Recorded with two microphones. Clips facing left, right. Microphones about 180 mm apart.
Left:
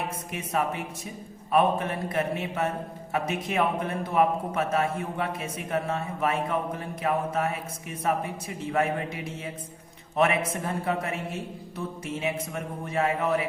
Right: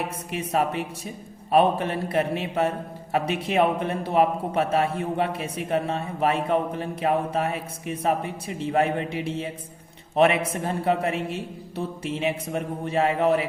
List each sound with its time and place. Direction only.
0.3 s a man's voice: 35° right (ahead or behind)